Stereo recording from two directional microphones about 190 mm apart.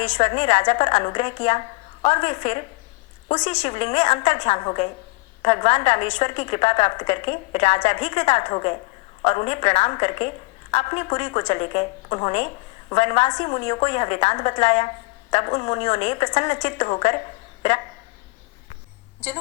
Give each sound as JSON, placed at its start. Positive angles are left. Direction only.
{"t": 0.0, "sound": "a woman's voice", "side_deg": 25}